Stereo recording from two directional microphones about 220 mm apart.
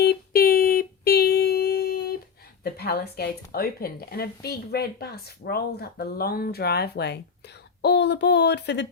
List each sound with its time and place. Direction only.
0.0 s child singing: 45° left (ahead or behind)
2.6 s speech: 45° left (ahead or behind)